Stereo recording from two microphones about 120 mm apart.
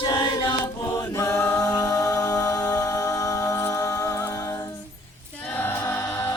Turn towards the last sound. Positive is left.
turn(degrees=25)  # may be behind; listen again after turning